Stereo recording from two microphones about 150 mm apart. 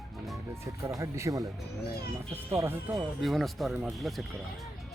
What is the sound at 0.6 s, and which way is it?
Speech, 20° right (ahead or behind).